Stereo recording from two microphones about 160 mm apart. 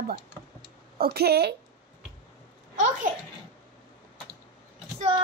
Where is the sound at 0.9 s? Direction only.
75° right (ahead or behind).